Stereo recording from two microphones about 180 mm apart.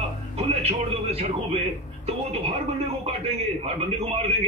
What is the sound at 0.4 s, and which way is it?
Speech, 35° right (ahead or behind).